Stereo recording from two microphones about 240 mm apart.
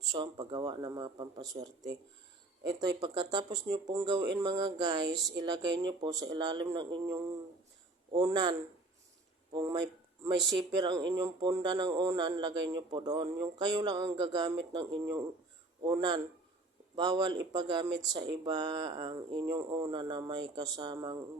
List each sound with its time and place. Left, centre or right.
0.1 s speech: centre
5.0 s speech: right
5.4 s a man's voice: centre